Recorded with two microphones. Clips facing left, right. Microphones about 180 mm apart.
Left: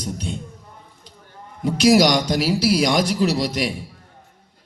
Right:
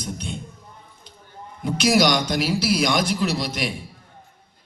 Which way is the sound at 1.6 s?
40° left (ahead or behind).